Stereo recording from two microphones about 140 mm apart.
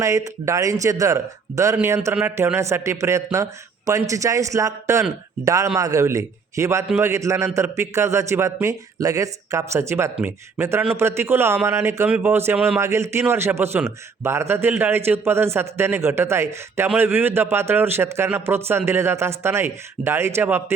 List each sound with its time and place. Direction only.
0.0 s a man's voice: 20° right (ahead or behind)
12.5 s a man's voice: 5° right (ahead or behind)
12.8 s a man's voice: 20° right (ahead or behind)